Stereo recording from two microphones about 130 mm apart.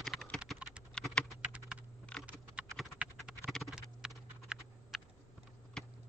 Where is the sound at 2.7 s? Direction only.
Centre (ahead or behind).